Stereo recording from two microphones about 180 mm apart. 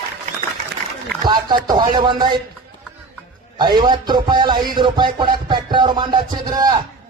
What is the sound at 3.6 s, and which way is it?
A man's voice, 25° right (ahead or behind).